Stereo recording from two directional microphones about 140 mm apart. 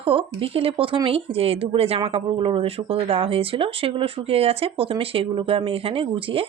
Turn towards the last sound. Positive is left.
turn(degrees=-40)  # may be behind; listen again after turning